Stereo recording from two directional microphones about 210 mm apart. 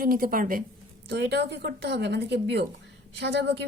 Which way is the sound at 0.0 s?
40° right (ahead or behind).